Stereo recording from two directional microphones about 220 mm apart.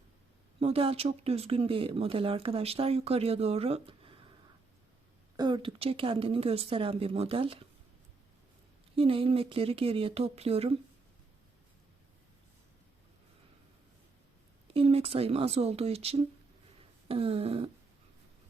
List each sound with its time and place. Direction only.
0.6 s speech: 25° right (ahead or behind)
5.4 s speech: 20° right (ahead or behind)
9.0 s speech: 25° right (ahead or behind)
14.7 s speech: 25° right (ahead or behind)